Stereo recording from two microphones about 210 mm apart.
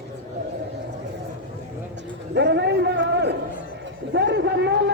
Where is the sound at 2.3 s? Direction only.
55° right (ahead or behind).